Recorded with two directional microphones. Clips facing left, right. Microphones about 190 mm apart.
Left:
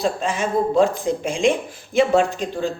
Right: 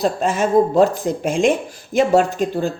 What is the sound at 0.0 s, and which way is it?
Speech, 45° right (ahead or behind).